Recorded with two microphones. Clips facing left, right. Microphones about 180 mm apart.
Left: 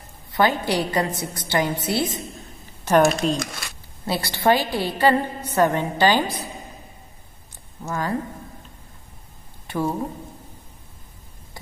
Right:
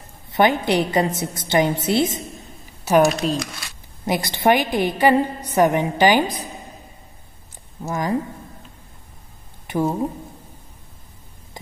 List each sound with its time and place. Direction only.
0.3 s a woman's voice: 20° right (ahead or behind)
2.8 s a woman's voice: 10° right (ahead or behind)
3.3 s speech: 50° left (ahead or behind)
4.0 s a woman's voice: 15° right (ahead or behind)
7.9 s a woman's voice: 15° right (ahead or behind)
9.7 s speech: 15° right (ahead or behind)